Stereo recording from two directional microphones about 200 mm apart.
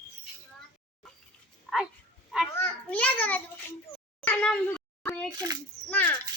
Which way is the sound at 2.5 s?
10° left (ahead or behind).